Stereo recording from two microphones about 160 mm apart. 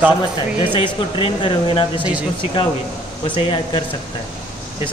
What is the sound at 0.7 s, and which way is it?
Speech, 30° left (ahead or behind).